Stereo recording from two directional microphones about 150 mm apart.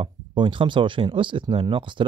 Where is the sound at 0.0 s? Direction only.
35° right (ahead or behind).